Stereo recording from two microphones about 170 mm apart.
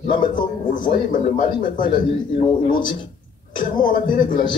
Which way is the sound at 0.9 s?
50° left (ahead or behind).